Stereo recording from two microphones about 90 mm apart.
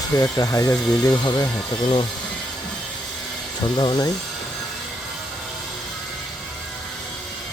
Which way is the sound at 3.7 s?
50° left (ahead or behind).